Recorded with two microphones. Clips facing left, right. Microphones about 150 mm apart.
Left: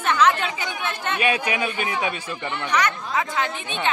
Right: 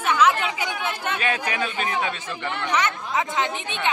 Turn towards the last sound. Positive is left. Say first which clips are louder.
# even
turn(degrees=-20)  # may be behind; listen again after turning